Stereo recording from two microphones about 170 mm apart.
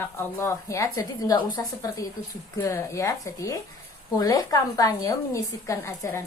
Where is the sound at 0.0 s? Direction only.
15° left (ahead or behind).